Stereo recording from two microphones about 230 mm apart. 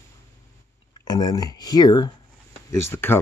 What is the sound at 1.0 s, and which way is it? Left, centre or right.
Speech, centre.